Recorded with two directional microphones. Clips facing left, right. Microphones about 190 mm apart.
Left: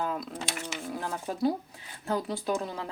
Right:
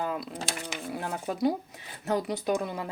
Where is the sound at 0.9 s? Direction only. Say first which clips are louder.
Right 2 dB; 15° right (ahead or behind).